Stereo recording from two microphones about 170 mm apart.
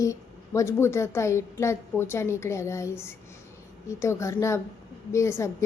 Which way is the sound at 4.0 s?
15° left (ahead or behind).